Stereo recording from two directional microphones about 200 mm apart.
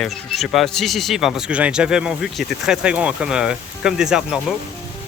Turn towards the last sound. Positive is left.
turn(degrees=-5)  # may be behind; listen again after turning